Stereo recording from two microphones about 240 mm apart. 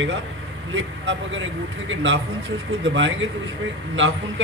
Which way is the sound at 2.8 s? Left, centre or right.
Right.